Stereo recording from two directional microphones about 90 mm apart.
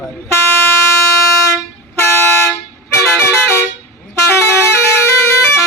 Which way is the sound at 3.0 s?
30° left (ahead or behind).